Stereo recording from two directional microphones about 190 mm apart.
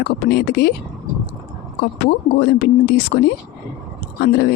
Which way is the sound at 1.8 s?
55° left (ahead or behind).